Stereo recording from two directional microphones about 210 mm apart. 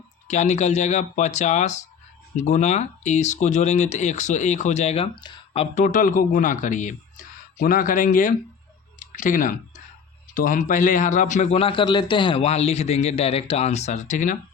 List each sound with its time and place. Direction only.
0.3 s speech: 35° left (ahead or behind)
9.0 s clicking: 40° left (ahead or behind)
10.3 s speech: 40° left (ahead or behind)